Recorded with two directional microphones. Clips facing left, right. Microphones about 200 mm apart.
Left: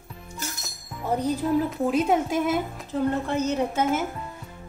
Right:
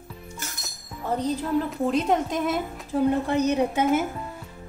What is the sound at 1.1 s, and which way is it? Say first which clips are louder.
A woman's voice: left 1 dB; 10° left (ahead or behind).